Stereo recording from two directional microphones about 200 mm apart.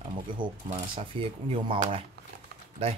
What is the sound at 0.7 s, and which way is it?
Speech, 30° right (ahead or behind).